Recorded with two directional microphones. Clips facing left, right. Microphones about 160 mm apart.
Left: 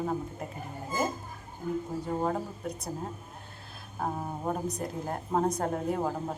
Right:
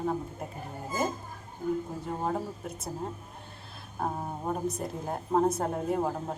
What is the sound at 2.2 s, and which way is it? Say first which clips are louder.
Speech: left 1 dB; 5° right (ahead or behind).